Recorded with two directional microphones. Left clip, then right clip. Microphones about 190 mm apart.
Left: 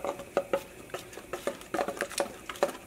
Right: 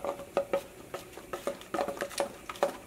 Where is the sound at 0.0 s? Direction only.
Centre (ahead or behind).